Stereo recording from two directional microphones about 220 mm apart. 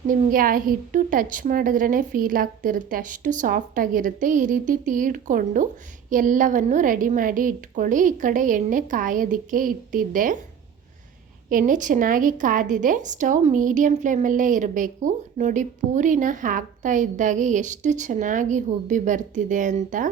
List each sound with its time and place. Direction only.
0.1 s a woman's voice: 40° right (ahead or behind)
11.4 s a woman's voice: 35° right (ahead or behind)